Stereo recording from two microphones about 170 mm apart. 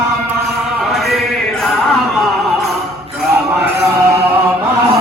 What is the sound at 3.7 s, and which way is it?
Music, 15° right (ahead or behind).